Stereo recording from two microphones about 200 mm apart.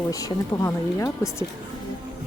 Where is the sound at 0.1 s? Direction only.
15° left (ahead or behind).